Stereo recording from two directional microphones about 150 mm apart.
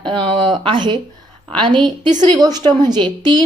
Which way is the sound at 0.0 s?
30° right (ahead or behind).